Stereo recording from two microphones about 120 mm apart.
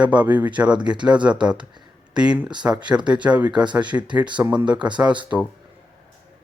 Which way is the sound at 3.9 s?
25° right (ahead or behind).